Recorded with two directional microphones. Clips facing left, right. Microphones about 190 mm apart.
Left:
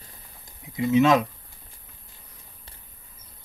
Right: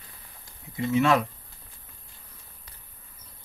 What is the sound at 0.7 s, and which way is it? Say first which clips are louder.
Speech: left 4 dB; 20° left (ahead or behind).